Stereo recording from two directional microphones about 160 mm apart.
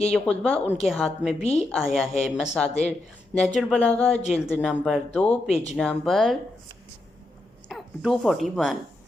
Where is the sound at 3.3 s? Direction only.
Centre (ahead or behind).